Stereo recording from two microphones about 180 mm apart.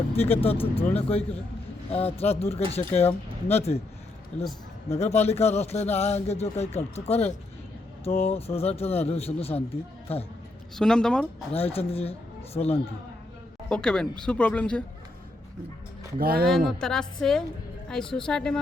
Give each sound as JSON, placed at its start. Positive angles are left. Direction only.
{"t": 0.2, "sound": "speech", "side_deg": 35}
{"t": 4.9, "sound": "speech", "side_deg": 35}
{"t": 10.8, "sound": "speech", "side_deg": 5}
{"t": 11.5, "sound": "speech", "side_deg": 35}
{"t": 13.7, "sound": "speech", "side_deg": 5}
{"t": 16.1, "sound": "speech", "side_deg": -55}
{"t": 16.5, "sound": "speech", "side_deg": 0}